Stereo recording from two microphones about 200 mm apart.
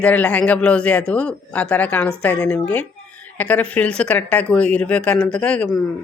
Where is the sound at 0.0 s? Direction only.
5° left (ahead or behind).